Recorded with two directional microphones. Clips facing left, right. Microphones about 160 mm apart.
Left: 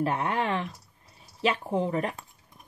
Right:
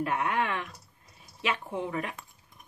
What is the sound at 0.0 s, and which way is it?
Speech, 35° left (ahead or behind).